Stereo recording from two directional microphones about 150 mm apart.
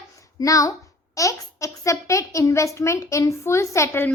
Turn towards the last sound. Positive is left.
turn(degrees=15)  # may be behind; listen again after turning